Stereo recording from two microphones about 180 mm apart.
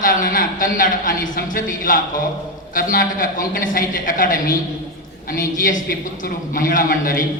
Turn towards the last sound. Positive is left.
turn(degrees=50)  # may be behind; listen again after turning